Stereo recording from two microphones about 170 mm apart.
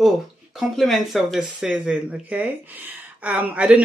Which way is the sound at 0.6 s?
Centre (ahead or behind).